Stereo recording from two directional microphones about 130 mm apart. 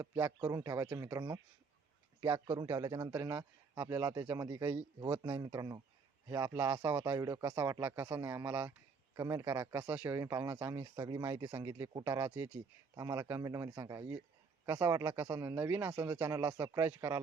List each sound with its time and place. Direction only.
0.0 s speech: 20° right (ahead or behind)
5.4 s speech: 30° right (ahead or behind)
10.8 s speech: 30° right (ahead or behind)